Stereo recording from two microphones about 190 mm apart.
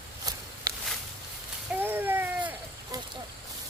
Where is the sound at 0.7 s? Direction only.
20° right (ahead or behind).